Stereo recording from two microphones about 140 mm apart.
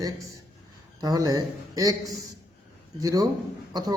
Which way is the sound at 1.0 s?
25° right (ahead or behind).